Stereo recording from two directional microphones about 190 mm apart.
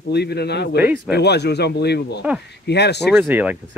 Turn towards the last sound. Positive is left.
turn(degrees=-10)  # may be behind; listen again after turning